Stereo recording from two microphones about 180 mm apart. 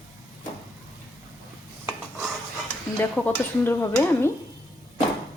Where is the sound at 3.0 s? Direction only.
10° left (ahead or behind).